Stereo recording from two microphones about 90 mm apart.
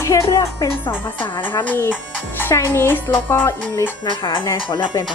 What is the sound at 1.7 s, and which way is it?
A child's voice, 20° left (ahead or behind).